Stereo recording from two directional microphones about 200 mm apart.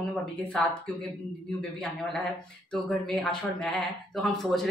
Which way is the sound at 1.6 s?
Centre (ahead or behind).